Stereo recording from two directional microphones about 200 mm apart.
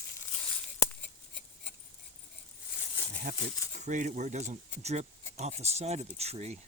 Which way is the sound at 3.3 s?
45° right (ahead or behind).